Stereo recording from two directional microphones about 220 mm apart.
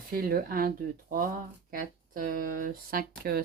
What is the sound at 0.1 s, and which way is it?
Speech, 40° right (ahead or behind).